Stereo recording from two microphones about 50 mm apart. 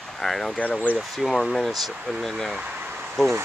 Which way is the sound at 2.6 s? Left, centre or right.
Right.